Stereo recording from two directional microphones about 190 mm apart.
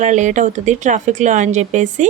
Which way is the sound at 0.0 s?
40° right (ahead or behind).